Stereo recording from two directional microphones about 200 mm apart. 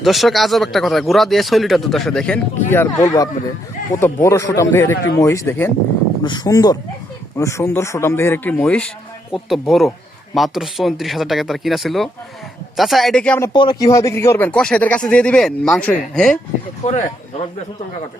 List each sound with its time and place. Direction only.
0.0 s speech: centre (ahead or behind)
13.5 s speech: 20° left (ahead or behind); by 16.4 s centre (ahead or behind)
16.8 s speech: 35° left (ahead or behind)